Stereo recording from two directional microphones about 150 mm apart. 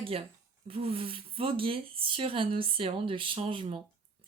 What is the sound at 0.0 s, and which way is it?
Speech, 40° right (ahead or behind).